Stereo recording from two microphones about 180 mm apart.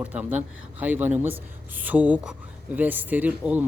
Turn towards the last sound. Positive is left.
turn(degrees=-10)  # may be behind; listen again after turning